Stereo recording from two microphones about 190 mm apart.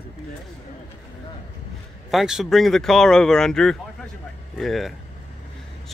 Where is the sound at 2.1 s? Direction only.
Centre (ahead or behind).